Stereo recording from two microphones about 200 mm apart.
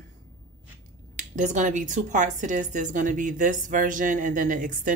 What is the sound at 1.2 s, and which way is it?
A woman's voice, 40° right (ahead or behind).